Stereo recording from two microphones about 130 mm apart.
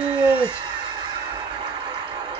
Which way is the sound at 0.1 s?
40° right (ahead or behind).